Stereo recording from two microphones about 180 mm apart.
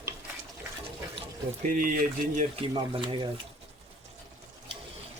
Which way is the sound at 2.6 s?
30° right (ahead or behind).